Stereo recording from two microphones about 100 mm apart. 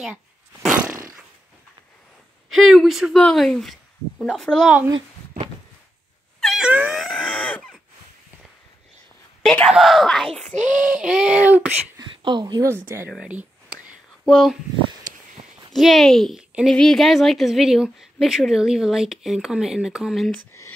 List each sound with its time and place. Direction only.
0.7 s roar: 15° right (ahead or behind)
2.5 s a woman's voice: centre (ahead or behind)
6.6 s wail: 10° right (ahead or behind)
7.0 s a sound: 5° left (ahead or behind)
9.4 s a woman's voice: 10° left (ahead or behind)
10.9 s a sound: 5° right (ahead or behind)
12.2 s speech: 50° right (ahead or behind)
12.6 s speech: 25° right (ahead or behind)
13.1 s a sound: 10° right (ahead or behind)
14.2 s a woman's voice: centre (ahead or behind)
15.1 s a sound: 40° right (ahead or behind)
15.7 s a woman's voice: centre (ahead or behind)
16.3 s a woman's voice: 5° right (ahead or behind)
16.7 s a woman's voice: 5° left (ahead or behind)